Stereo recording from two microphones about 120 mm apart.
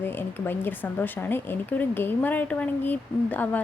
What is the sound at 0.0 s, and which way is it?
Speech, 15° left (ahead or behind).